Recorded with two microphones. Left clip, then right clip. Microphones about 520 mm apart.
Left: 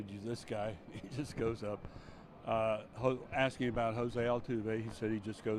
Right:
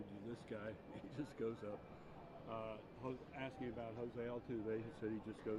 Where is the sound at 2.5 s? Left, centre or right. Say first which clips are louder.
Left 16 dB; left.